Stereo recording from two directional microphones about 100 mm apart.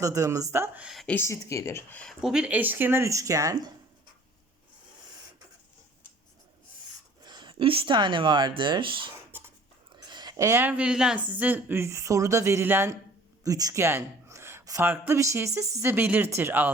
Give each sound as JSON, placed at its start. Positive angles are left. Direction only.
{"t": 0.0, "sound": "speech", "side_deg": -30}
{"t": 0.8, "sound": "speech", "side_deg": -5}
{"t": 1.0, "sound": "speech", "side_deg": 20}
{"t": 2.2, "sound": "speech", "side_deg": -10}
{"t": 7.2, "sound": "a sound", "side_deg": -45}
{"t": 7.6, "sound": "speech", "side_deg": -65}
{"t": 9.9, "sound": "a sound", "side_deg": -45}
{"t": 10.3, "sound": "speech", "side_deg": -35}
{"t": 10.6, "sound": "speech", "side_deg": -15}
{"t": 13.4, "sound": "speech", "side_deg": -35}